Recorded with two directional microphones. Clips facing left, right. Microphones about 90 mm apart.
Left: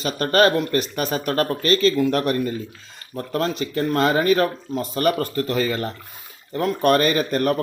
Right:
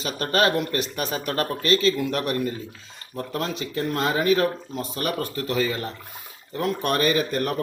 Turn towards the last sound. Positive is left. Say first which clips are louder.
# left 2 dB
turn(degrees=55)  # may be behind; listen again after turning